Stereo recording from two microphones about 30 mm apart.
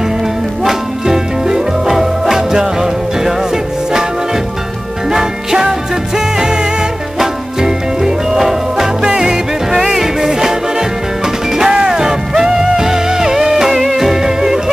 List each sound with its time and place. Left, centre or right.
0.7 s music: centre
5.1 s music: centre
9.0 s music: right
9.7 s music: centre